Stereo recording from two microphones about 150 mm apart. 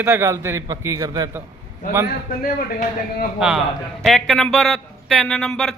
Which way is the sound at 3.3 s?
5° right (ahead or behind).